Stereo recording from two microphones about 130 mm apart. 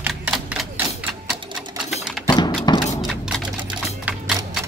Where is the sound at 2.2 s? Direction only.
35° left (ahead or behind).